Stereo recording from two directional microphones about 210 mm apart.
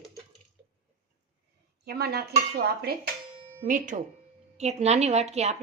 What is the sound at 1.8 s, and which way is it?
Dishes, 50° right (ahead or behind).